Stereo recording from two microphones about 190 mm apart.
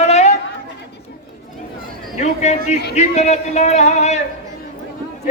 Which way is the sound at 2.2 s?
35° left (ahead or behind).